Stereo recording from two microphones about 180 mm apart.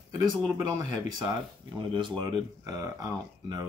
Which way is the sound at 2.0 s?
25° right (ahead or behind).